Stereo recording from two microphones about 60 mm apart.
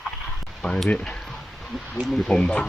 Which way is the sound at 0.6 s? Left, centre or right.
Centre.